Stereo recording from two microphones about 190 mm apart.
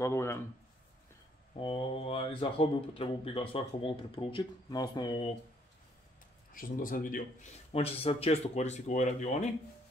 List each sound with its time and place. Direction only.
0.0 s speech: 15° left (ahead or behind)
1.5 s speech: 25° left (ahead or behind)
6.5 s speech: 45° left (ahead or behind)
7.7 s speech: 30° left (ahead or behind)